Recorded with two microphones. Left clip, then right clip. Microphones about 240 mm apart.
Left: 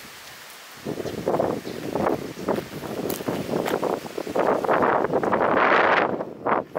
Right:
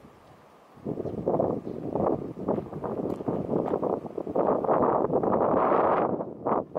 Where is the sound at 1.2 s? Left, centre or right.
Centre.